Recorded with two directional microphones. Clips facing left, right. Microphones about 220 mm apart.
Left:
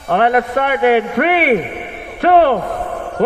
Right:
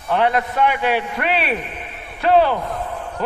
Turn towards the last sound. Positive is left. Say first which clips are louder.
# left 5 dB
turn(degrees=55)  # may be behind; listen again after turning